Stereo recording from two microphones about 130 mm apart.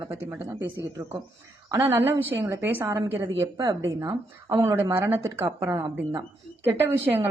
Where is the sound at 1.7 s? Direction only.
20° right (ahead or behind).